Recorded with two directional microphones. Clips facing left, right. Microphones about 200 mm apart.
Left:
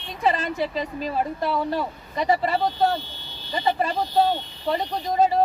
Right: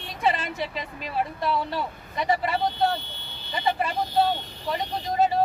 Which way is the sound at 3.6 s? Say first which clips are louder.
Left 3 dB; 35° left (ahead or behind).